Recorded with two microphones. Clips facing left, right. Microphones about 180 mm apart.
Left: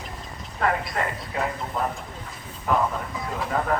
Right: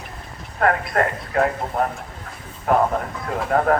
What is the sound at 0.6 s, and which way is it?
A man's voice, 55° right (ahead or behind).